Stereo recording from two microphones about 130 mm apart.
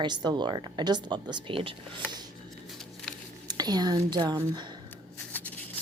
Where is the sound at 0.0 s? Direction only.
35° right (ahead or behind).